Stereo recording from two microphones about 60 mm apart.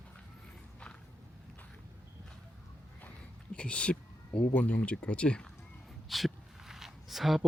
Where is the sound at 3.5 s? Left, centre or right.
Centre.